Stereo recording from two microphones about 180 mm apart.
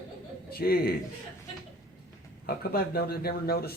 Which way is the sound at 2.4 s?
55° left (ahead or behind).